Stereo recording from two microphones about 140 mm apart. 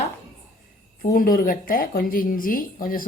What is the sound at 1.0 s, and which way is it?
Speech, 75° left (ahead or behind).